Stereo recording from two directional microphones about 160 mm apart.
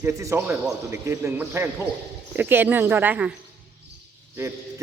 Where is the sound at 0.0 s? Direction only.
15° right (ahead or behind).